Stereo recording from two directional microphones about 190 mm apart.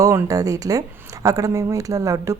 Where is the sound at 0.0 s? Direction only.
15° right (ahead or behind).